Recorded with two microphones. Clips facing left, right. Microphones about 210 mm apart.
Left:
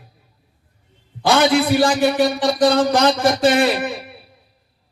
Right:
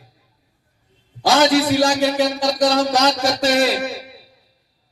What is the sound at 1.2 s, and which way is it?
A man's voice, 55° left (ahead or behind).